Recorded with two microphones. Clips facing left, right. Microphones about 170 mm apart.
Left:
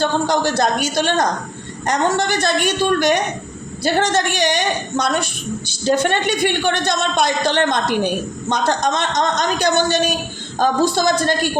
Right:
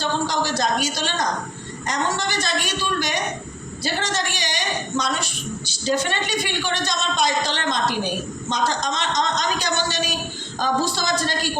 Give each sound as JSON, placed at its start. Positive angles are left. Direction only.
{"t": 0.0, "sound": "a woman's voice", "side_deg": 55}